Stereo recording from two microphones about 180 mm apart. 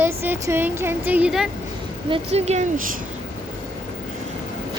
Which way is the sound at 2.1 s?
35° right (ahead or behind).